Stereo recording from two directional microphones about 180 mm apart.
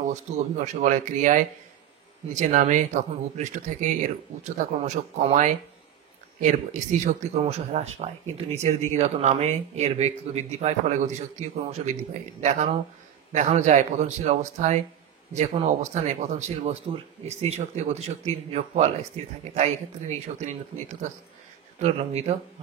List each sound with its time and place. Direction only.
0.0 s speech: 40° right (ahead or behind)
19.5 s speech: 40° right (ahead or behind)
21.8 s speech: 35° right (ahead or behind)